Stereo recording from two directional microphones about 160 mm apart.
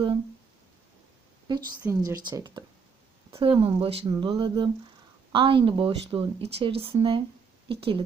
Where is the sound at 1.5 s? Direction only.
25° right (ahead or behind).